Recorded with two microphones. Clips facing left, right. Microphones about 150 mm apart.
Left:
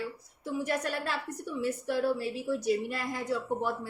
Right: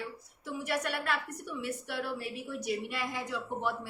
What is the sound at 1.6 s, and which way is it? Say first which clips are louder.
A woman's voice: left 8 dB; 40° left (ahead or behind).